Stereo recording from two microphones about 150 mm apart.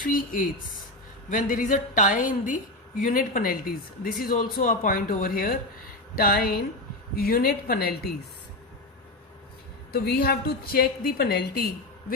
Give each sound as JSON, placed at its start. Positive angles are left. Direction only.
{"t": 0.0, "sound": "a woman's voice", "side_deg": 65}
{"t": 9.9, "sound": "a woman's voice", "side_deg": 90}